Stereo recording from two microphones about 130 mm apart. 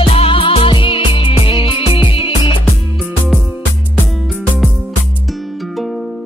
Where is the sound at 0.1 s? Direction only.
45° left (ahead or behind).